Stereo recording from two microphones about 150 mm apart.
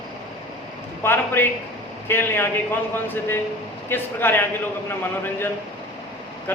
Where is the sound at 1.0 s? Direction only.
15° left (ahead or behind).